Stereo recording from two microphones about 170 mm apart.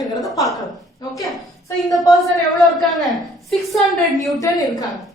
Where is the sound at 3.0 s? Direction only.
Centre (ahead or behind).